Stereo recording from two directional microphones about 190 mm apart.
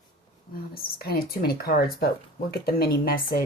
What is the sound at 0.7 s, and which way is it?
Whispering, 50° left (ahead or behind).